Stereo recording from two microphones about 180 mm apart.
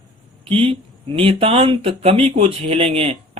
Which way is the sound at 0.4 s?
30° right (ahead or behind).